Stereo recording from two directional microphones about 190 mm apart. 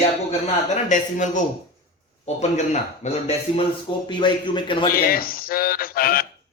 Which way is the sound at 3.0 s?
35° left (ahead or behind).